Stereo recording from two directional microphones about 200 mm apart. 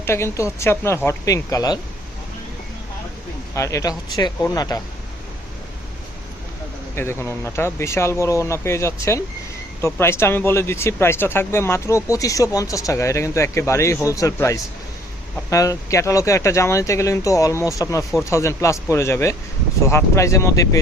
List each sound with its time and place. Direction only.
0.0 s speech: 15° left (ahead or behind)
3.5 s speech: 15° left (ahead or behind)
6.9 s speech: 10° left (ahead or behind)